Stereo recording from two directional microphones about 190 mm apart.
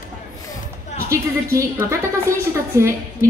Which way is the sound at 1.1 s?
15° right (ahead or behind).